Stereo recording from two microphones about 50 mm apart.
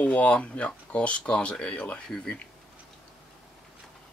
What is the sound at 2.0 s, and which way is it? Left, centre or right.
Speech, centre.